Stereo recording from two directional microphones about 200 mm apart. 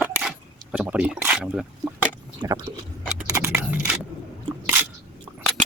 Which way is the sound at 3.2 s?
10° right (ahead or behind).